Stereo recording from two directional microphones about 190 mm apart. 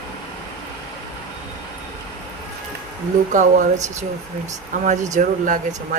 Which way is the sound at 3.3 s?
45° right (ahead or behind).